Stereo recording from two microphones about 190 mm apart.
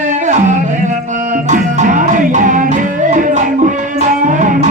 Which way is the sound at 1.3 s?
40° right (ahead or behind).